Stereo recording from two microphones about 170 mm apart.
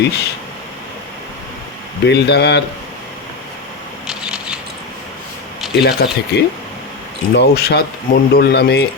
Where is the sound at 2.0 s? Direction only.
90° left.